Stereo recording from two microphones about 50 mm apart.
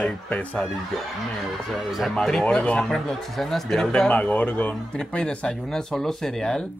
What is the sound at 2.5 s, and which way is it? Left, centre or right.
Speech, left.